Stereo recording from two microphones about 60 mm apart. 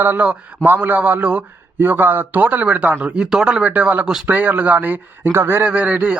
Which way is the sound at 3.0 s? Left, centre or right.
Centre.